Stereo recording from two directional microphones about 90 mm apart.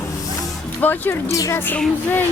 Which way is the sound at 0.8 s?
20° left (ahead or behind).